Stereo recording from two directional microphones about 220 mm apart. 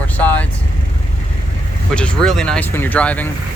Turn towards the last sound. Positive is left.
turn(degrees=5)  # may be behind; listen again after turning